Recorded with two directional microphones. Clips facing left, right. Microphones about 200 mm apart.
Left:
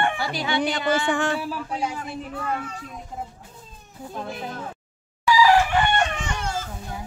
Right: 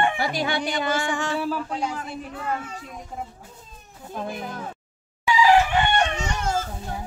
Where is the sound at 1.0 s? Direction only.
60° left (ahead or behind).